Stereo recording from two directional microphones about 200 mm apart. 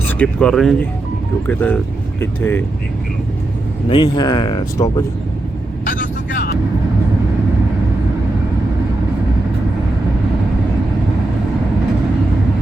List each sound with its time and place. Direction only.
0.2 s speech: 5° left (ahead or behind)
3.8 s speech: 25° left (ahead or behind)
5.8 s vehicle: 45° left (ahead or behind)